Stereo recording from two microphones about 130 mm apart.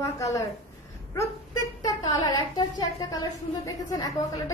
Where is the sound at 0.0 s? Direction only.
25° left (ahead or behind).